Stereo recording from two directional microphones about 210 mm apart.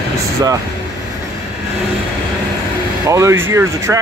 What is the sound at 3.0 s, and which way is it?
Speech, 15° right (ahead or behind).